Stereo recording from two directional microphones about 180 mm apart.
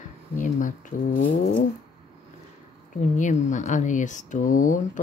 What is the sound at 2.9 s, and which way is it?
Speech, 45° left (ahead or behind).